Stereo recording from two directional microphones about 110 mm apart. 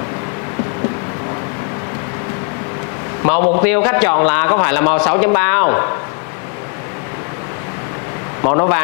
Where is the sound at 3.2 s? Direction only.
30° left (ahead or behind).